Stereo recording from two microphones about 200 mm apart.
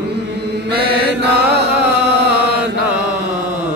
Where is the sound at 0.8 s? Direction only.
55° right (ahead or behind).